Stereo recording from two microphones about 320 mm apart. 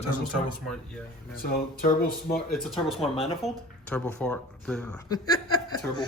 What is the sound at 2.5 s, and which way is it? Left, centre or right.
Speech, centre.